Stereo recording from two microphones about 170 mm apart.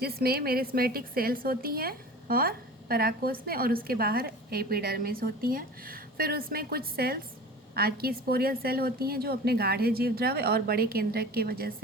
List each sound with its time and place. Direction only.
0.0 s a woman's voice: 65° right (ahead or behind)